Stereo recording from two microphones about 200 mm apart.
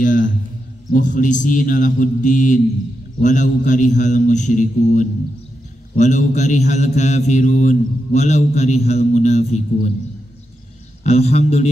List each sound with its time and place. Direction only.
0.0 s a sound: 40° left (ahead or behind)
0.9 s a man's voice: 40° left (ahead or behind)
11.1 s a man's voice: 30° left (ahead or behind)